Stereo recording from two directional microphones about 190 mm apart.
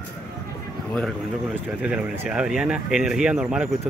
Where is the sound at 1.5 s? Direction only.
5° right (ahead or behind).